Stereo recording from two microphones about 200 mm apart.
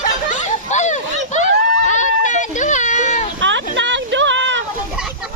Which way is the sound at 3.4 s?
65° right (ahead or behind).